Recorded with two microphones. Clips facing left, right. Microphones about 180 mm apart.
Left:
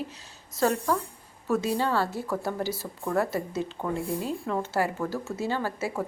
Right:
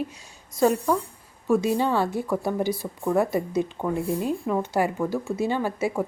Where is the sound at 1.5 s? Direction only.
15° right (ahead or behind).